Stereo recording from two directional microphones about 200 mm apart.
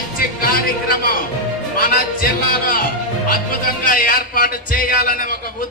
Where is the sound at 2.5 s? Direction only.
45° left (ahead or behind).